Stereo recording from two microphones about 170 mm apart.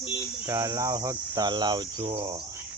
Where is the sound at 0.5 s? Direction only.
20° right (ahead or behind).